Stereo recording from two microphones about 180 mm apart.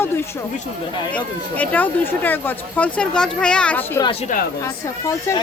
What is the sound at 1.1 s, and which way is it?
Speech, 10° left (ahead or behind).